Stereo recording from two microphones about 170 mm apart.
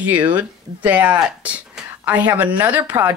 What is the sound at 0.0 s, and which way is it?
Speech, 10° right (ahead or behind).